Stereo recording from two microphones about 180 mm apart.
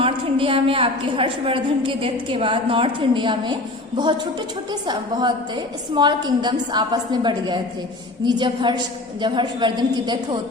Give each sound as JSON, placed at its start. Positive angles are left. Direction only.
{"t": 0.0, "sound": "a woman's voice", "side_deg": -30}
{"t": 4.7, "sound": "a woman's voice", "side_deg": -25}